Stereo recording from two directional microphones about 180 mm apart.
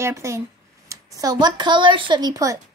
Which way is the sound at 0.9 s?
15° right (ahead or behind).